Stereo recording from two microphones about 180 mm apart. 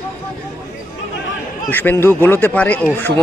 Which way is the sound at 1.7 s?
10° left (ahead or behind).